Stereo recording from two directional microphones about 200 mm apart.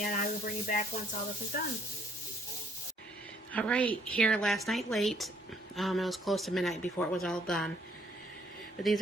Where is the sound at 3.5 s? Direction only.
5° left (ahead or behind).